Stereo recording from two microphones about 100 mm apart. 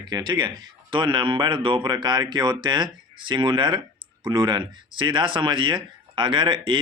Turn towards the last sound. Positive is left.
turn(degrees=-55)  # may be behind; listen again after turning